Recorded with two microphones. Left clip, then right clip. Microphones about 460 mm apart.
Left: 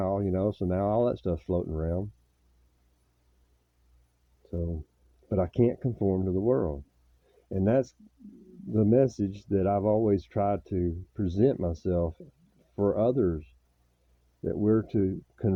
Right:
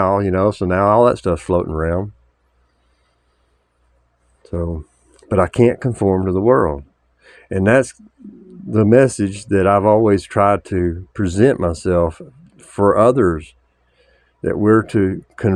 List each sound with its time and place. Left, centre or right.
0.0 s speech: left
5.3 s speech: left